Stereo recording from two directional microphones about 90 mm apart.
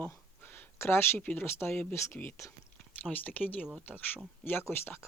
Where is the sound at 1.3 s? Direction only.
25° left (ahead or behind).